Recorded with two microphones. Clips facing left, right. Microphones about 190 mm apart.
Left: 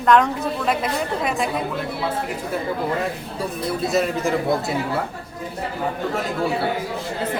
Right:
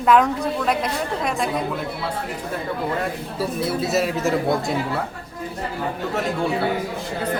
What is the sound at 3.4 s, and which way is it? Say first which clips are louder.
A woman's voice: right 1 dB; 5° right (ahead or behind).